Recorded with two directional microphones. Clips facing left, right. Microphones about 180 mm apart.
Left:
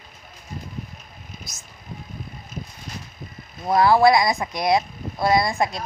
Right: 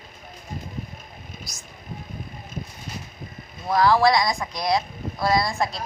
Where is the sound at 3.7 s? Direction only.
25° left (ahead or behind).